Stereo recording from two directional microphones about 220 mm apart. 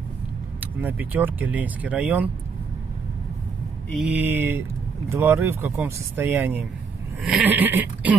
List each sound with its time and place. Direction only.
0.6 s speech: 10° right (ahead or behind)
3.9 s speech: 5° right (ahead or behind)